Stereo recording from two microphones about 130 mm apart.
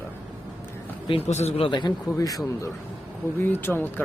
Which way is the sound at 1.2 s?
60° left (ahead or behind).